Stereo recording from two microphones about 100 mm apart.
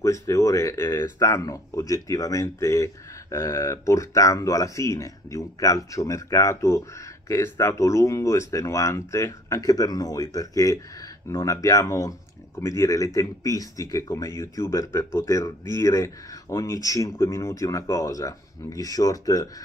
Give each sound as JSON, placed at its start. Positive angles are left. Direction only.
{"t": 0.0, "sound": "speech", "side_deg": 30}